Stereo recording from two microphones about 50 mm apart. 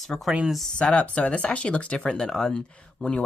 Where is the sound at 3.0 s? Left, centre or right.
Left.